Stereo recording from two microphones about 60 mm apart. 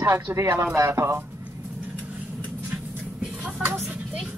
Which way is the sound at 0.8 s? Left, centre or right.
Right.